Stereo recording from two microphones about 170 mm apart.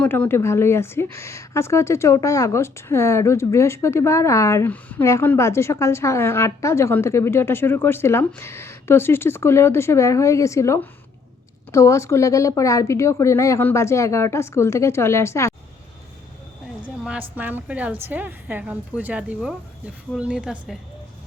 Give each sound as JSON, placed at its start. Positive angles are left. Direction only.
{"t": 0.0, "sound": "speech", "side_deg": 10}
{"t": 16.8, "sound": "a woman's voice", "side_deg": -5}